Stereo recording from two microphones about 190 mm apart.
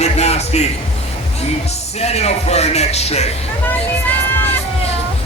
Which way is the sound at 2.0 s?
35° left (ahead or behind).